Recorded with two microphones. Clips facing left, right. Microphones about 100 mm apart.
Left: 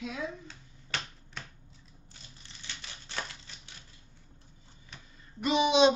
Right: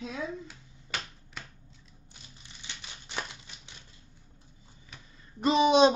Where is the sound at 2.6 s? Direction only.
15° right (ahead or behind).